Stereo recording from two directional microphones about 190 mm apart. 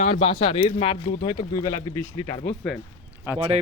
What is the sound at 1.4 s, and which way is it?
Speech, 20° left (ahead or behind).